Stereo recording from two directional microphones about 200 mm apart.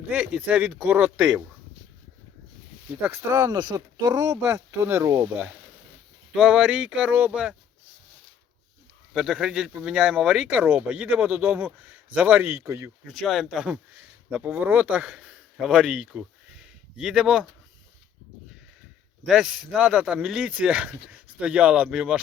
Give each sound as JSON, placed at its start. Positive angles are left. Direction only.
{"t": 0.1, "sound": "speech", "side_deg": -5}
{"t": 2.9, "sound": "speech", "side_deg": -10}
{"t": 9.1, "sound": "speech", "side_deg": 0}
{"t": 13.1, "sound": "speech", "side_deg": 0}
{"t": 19.2, "sound": "speech", "side_deg": 0}